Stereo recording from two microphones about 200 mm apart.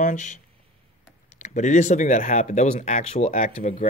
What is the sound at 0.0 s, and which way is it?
Speech, 40° left (ahead or behind).